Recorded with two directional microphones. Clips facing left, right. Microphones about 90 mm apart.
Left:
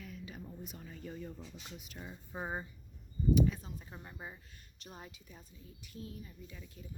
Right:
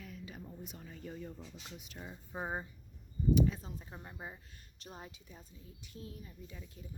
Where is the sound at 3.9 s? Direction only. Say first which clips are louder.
Right 1 dB; 15° right (ahead or behind).